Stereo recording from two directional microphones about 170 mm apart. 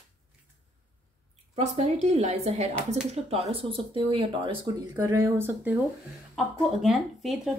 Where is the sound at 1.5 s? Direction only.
40° right (ahead or behind); by 5.8 s 10° right (ahead or behind).